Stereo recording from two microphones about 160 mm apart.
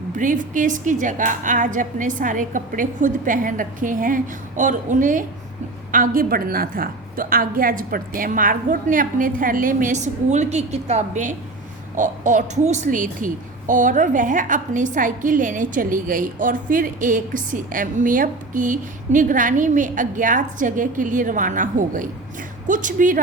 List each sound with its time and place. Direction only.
0.1 s a woman's voice: 55° right (ahead or behind)